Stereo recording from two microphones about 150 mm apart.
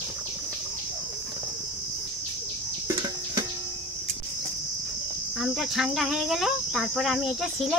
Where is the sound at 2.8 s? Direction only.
30° right (ahead or behind).